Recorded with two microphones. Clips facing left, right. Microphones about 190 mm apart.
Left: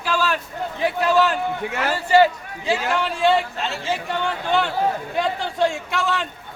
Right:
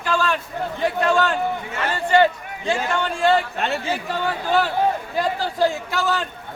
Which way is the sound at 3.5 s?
60° right (ahead or behind).